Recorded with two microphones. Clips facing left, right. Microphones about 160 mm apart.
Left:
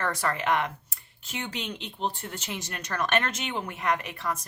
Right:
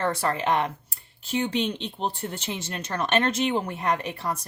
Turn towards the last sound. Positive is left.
turn(degrees=-30)  # may be behind; listen again after turning